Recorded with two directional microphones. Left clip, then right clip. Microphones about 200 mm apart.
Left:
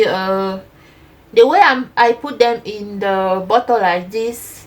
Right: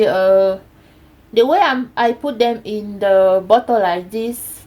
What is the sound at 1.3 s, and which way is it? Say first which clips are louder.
Speech: left 3 dB; 35° right (ahead or behind).